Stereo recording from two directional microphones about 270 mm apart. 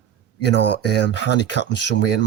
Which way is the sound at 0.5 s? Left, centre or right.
Left.